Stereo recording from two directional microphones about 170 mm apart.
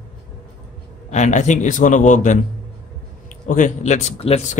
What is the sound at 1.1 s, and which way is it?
A man's voice, 45° left (ahead or behind).